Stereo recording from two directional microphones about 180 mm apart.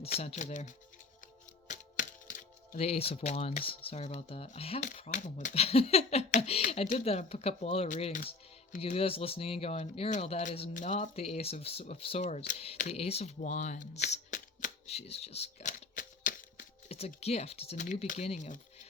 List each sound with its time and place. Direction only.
0.2 s speech: 40° left (ahead or behind)
8.8 s speech: 35° left (ahead or behind)
16.0 s a sound: 50° left (ahead or behind)
17.2 s speech: 35° left (ahead or behind)